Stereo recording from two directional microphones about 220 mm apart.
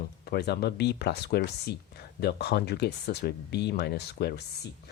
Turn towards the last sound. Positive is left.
turn(degrees=50)  # may be behind; listen again after turning